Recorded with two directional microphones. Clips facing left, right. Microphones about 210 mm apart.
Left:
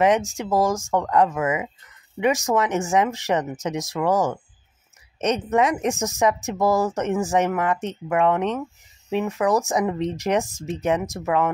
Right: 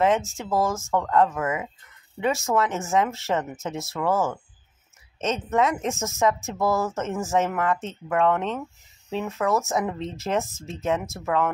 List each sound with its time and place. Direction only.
0.0 s a woman's voice: 15° left (ahead or behind)
1.4 s speech: centre (ahead or behind)
2.2 s a woman's voice: 15° left (ahead or behind)